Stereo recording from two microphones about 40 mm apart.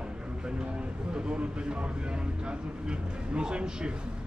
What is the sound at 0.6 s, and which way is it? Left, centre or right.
Speech, right.